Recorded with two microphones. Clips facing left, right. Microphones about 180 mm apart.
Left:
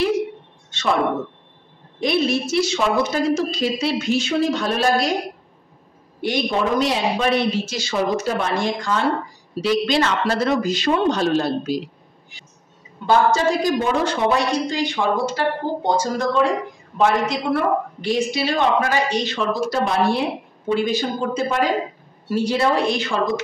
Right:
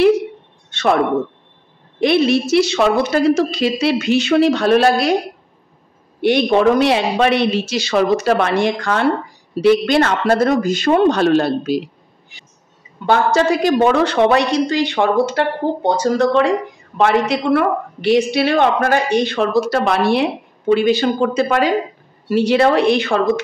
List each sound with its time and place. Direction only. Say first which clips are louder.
0.7 s a sound: right 5 dB; 60° right (ahead or behind)
2.0 s a woman's voice: right 6 dB; 70° right (ahead or behind)
6.2 s a woman's voice: right 8 dB; 65° right (ahead or behind)
13.0 s a woman's voice: right 2 dB; 65° right (ahead or behind)